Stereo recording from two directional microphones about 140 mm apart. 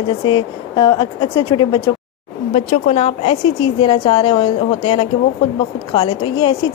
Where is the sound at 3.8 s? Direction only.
40° left (ahead or behind).